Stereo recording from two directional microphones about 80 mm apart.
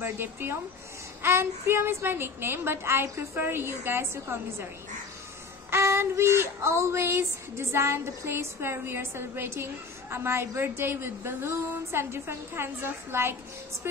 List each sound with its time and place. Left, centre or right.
0.0 s speech: right
1.2 s child singing: right
5.7 s child singing: right